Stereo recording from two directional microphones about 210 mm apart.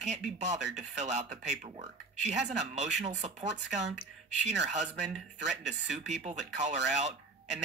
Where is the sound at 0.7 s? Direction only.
35° right (ahead or behind).